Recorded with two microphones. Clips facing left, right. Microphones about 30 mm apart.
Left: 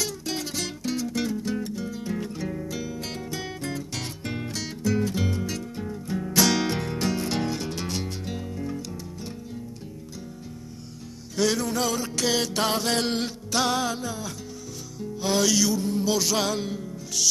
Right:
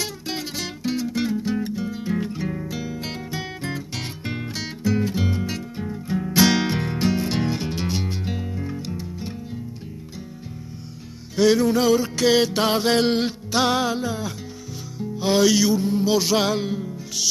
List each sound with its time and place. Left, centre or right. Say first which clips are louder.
0.0 s music: right 1 dB; right
11.3 s music: right 7 dB; centre